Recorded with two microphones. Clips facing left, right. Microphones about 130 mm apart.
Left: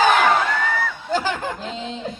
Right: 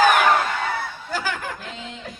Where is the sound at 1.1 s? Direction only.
20° left (ahead or behind).